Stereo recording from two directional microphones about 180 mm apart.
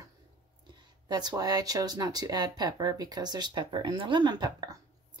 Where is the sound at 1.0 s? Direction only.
20° right (ahead or behind).